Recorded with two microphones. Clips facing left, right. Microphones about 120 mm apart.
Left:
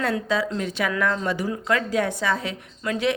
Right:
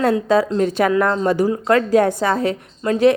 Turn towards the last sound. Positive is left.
turn(degrees=-40)  # may be behind; listen again after turning